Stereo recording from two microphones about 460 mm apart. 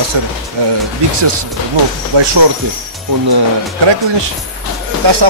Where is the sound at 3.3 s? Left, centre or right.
Right.